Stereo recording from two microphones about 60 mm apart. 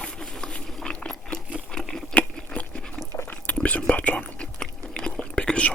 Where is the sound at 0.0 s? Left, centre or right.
Centre.